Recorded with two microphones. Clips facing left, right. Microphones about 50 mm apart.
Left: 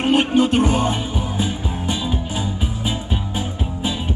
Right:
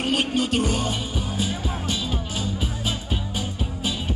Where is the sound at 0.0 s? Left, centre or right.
Left.